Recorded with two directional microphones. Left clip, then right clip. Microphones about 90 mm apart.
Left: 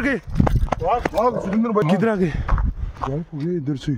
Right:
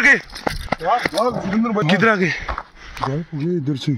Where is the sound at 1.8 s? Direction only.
45° left (ahead or behind).